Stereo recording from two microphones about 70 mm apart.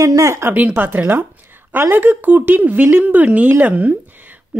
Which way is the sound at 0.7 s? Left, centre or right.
Right.